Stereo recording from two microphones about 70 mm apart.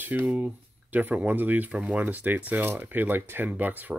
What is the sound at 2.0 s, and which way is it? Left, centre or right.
Speech, right.